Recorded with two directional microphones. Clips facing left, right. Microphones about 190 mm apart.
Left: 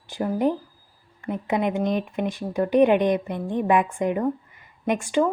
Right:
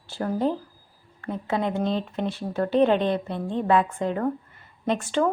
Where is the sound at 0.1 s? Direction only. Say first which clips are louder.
Left 2 dB; 15° left (ahead or behind).